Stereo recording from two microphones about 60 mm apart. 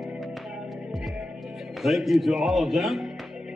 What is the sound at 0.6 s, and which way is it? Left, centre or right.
Music, centre.